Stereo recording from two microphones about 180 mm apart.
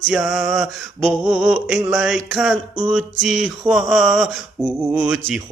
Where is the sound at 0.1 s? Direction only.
Centre (ahead or behind).